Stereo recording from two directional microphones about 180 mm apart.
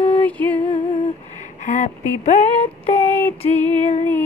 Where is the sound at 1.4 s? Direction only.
45° left (ahead or behind).